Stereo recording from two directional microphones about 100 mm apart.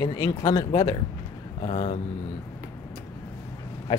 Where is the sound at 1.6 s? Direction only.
90° left.